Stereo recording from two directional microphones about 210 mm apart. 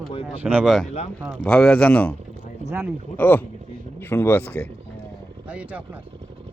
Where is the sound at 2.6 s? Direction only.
10° right (ahead or behind).